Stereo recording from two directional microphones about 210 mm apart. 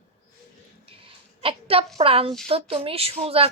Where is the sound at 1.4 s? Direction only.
25° right (ahead or behind).